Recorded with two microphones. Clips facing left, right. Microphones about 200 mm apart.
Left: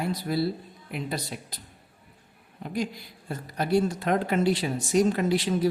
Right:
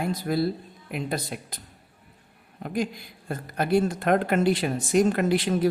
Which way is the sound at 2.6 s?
50° right (ahead or behind).